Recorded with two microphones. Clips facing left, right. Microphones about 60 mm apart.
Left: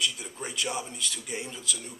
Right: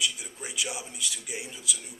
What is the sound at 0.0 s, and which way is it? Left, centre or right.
A man's voice, centre.